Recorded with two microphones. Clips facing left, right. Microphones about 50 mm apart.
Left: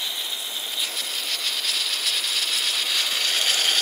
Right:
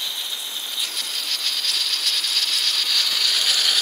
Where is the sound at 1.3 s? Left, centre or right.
Centre.